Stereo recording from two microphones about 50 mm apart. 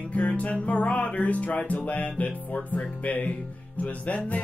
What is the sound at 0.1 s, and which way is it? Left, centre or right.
Music, left.